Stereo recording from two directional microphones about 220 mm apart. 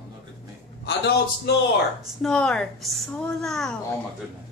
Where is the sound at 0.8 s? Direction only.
50° left (ahead or behind).